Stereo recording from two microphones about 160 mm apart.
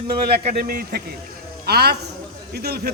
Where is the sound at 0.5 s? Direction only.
70° right (ahead or behind).